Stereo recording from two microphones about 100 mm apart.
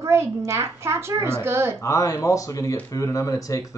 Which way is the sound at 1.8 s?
35° left (ahead or behind).